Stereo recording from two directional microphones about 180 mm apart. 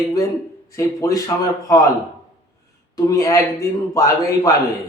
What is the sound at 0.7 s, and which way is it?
A man's voice, 20° left (ahead or behind).